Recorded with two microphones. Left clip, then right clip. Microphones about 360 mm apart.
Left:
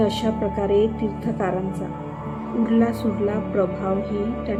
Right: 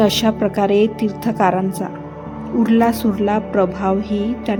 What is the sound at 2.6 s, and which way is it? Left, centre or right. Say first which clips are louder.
Music: right 6 dB; right.